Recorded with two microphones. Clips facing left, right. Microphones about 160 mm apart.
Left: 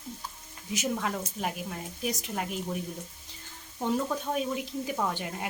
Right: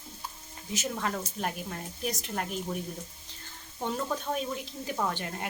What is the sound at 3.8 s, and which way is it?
Speech, 5° left (ahead or behind).